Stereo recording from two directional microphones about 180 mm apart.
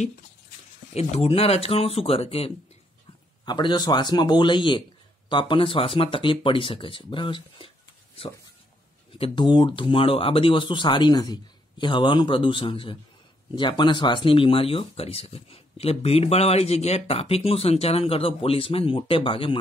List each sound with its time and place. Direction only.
0.9 s speech: 35° left (ahead or behind)
9.2 s speech: 25° left (ahead or behind)